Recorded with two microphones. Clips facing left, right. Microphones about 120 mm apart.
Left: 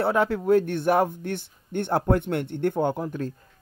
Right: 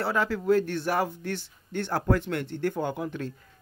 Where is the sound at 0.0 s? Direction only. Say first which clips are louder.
Left 4 dB; 55° left (ahead or behind).